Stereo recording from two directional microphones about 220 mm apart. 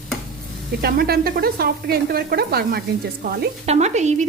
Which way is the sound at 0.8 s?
45° right (ahead or behind).